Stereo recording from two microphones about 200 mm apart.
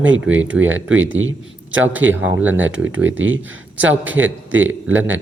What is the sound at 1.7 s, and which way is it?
Speech, 10° right (ahead or behind).